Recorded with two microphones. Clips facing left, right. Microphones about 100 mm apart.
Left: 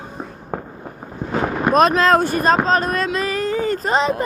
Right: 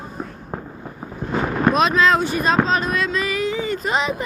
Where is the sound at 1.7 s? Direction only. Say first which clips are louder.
Left 3 dB; 45° left (ahead or behind).